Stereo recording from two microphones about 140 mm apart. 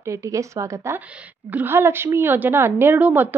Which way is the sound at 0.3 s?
20° right (ahead or behind).